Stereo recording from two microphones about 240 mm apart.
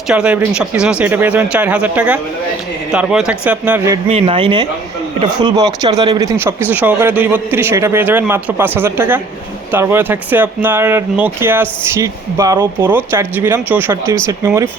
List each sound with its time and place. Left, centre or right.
0.1 s speech: centre
4.1 s speech: right